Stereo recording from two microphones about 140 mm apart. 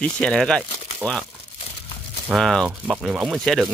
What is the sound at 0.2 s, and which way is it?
Speech, 5° left (ahead or behind).